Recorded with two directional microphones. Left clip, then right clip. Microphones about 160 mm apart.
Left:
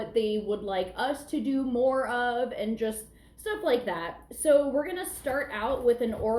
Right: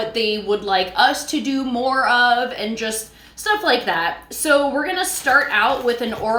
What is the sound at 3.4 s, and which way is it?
A woman's voice, 15° right (ahead or behind).